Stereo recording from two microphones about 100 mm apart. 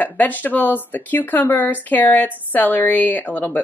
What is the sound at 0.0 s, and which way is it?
A woman's voice, 15° left (ahead or behind).